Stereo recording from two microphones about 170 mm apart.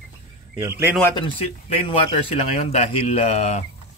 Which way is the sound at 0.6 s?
15° right (ahead or behind).